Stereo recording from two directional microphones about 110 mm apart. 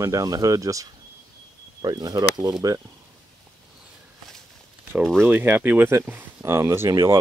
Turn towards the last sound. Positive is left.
turn(degrees=-25)  # may be behind; listen again after turning